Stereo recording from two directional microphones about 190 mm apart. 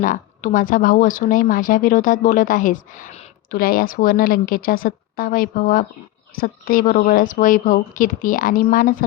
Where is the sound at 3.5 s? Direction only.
50° left (ahead or behind).